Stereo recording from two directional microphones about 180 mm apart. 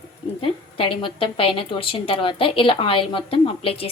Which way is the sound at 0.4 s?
30° left (ahead or behind).